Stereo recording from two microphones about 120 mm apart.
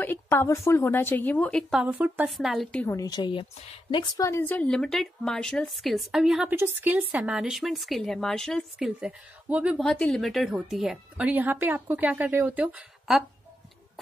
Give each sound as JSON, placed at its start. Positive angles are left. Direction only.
{"t": 0.0, "sound": "a woman's voice", "side_deg": 20}
{"t": 1.7, "sound": "speech", "side_deg": -10}
{"t": 2.2, "sound": "a woman's voice", "side_deg": 0}
{"t": 2.9, "sound": "speech", "side_deg": 30}
{"t": 4.4, "sound": "a woman's voice", "side_deg": 15}
{"t": 6.5, "sound": "a woman's voice", "side_deg": -20}
{"t": 8.7, "sound": "speech", "side_deg": -5}
{"t": 9.8, "sound": "speech", "side_deg": 5}